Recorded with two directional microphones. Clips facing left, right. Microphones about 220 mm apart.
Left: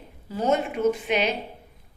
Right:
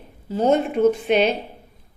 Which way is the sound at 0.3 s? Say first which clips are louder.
Right 5 dB; 30° right (ahead or behind).